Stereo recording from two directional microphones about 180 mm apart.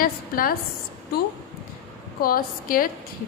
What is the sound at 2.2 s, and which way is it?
Speech, 55° left (ahead or behind).